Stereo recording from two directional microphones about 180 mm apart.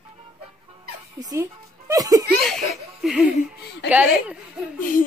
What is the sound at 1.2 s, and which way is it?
Speech, 15° right (ahead or behind).